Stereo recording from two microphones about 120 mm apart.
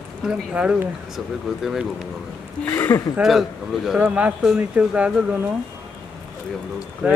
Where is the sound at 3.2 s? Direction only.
Centre (ahead or behind).